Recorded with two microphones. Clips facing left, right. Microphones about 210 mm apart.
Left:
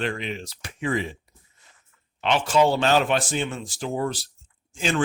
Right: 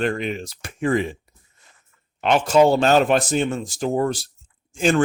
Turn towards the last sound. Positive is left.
turn(degrees=-45)  # may be behind; listen again after turning